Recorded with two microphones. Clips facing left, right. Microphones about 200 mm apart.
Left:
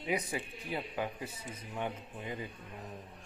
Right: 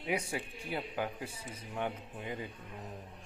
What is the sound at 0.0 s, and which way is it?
Speech, 10° right (ahead or behind).